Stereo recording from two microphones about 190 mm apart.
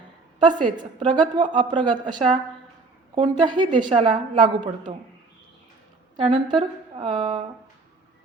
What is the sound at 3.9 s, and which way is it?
Speech, 35° right (ahead or behind).